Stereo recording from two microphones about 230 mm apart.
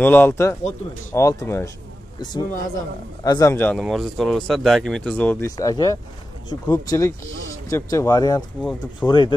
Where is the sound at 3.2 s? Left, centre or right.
Centre.